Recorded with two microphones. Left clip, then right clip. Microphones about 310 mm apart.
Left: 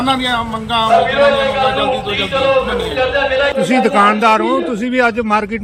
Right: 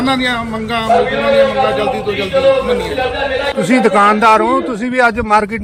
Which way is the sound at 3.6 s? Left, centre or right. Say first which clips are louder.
Right 4 dB; centre.